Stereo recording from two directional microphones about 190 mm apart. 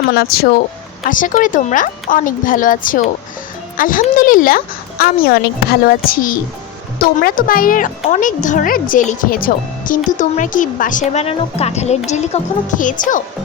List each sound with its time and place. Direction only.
0.1 s speech: 55° left (ahead or behind)
1.0 s a woman's voice: 45° left (ahead or behind)